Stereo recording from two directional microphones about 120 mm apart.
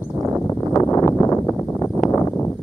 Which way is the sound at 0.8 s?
25° left (ahead or behind).